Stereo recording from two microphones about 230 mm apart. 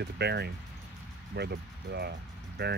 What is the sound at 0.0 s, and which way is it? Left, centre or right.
Speech, right.